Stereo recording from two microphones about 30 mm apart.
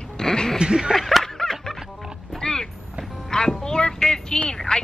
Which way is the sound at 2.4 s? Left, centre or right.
Left.